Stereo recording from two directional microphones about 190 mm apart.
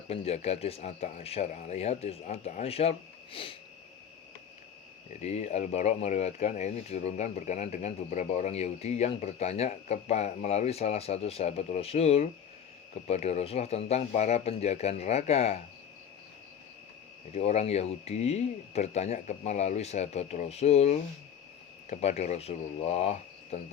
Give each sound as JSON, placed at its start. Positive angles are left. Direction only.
{"t": 0.1, "sound": "speech", "side_deg": 35}
{"t": 3.4, "sound": "sniff", "side_deg": 30}
{"t": 5.2, "sound": "speech", "side_deg": 35}
{"t": 17.3, "sound": "speech", "side_deg": 35}